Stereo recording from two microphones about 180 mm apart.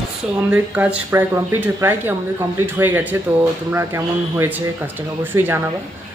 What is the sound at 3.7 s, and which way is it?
Speech, 15° right (ahead or behind).